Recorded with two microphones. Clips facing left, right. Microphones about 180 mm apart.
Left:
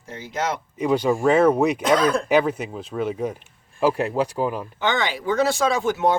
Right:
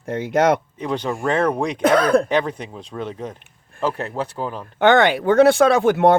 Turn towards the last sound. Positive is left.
turn(degrees=-60)  # may be behind; listen again after turning